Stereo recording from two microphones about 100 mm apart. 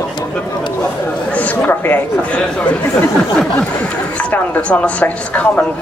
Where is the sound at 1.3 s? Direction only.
15° left (ahead or behind).